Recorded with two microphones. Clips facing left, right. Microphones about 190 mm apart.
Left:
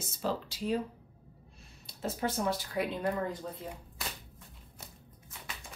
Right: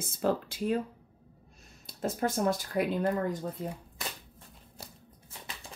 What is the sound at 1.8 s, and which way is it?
Speech, 45° right (ahead or behind).